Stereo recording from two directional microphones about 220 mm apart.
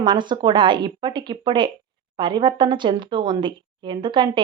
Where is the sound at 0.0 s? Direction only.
20° right (ahead or behind).